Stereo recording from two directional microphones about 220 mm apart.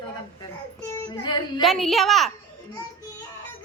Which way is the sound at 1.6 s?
Centre (ahead or behind).